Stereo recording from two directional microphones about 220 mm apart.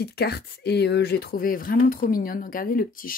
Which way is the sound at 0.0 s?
45° left (ahead or behind).